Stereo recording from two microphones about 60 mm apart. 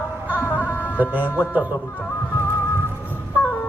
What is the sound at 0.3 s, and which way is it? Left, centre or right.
Music, left.